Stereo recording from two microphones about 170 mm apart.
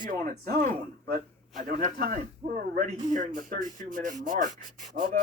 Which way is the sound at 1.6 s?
50° right (ahead or behind).